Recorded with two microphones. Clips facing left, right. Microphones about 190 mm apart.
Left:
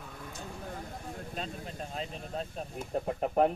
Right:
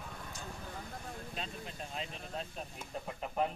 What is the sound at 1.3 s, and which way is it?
Speech, 40° left (ahead or behind).